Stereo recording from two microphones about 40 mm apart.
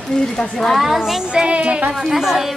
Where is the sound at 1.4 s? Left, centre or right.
Right.